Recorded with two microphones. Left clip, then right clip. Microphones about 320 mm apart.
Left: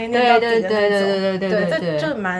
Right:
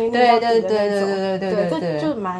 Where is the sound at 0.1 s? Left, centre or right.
Centre.